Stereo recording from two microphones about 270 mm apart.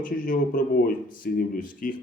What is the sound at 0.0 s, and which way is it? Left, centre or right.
Speech, left.